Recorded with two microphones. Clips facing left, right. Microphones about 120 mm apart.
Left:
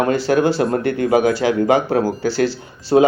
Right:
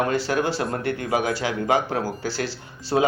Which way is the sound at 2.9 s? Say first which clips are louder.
Left 8 dB; 40° left (ahead or behind).